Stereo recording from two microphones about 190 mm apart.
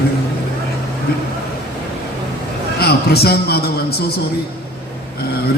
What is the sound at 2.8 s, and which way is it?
A man's voice, 55° left (ahead or behind).